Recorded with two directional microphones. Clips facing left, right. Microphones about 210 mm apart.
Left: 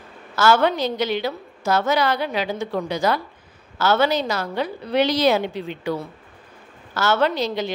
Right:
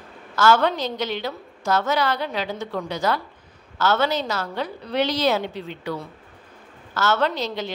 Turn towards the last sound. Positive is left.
turn(degrees=10)  # may be behind; listen again after turning